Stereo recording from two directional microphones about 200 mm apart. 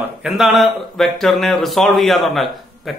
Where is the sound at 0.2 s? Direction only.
Centre (ahead or behind).